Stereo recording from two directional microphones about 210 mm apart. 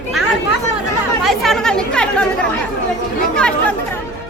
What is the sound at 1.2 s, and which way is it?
Speech, centre (ahead or behind).